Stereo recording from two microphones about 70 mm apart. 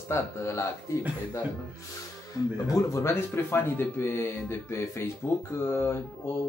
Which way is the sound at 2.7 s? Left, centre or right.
Left.